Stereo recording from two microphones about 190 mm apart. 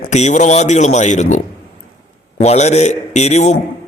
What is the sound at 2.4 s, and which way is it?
A man's voice, 35° left (ahead or behind).